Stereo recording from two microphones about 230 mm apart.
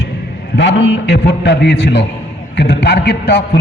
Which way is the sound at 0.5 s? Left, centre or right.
Left.